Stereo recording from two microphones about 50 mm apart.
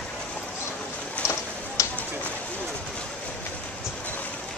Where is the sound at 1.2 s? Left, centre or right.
Left.